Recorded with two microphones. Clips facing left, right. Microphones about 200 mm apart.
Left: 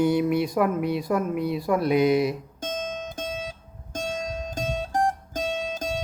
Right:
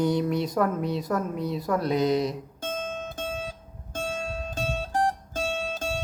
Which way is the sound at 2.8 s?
20° left (ahead or behind).